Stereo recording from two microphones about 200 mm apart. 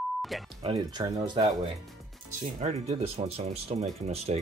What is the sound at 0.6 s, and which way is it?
Speech, 25° right (ahead or behind).